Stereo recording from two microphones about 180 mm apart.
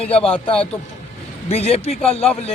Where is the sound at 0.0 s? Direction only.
30° left (ahead or behind).